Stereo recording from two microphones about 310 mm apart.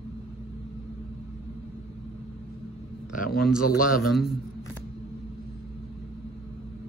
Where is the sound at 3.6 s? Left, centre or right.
Left.